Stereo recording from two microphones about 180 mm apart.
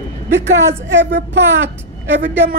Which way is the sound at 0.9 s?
75° right (ahead or behind).